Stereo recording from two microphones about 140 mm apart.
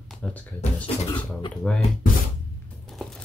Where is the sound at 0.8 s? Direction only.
35° left (ahead or behind).